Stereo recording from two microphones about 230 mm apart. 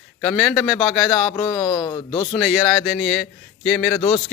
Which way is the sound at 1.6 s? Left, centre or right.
Centre.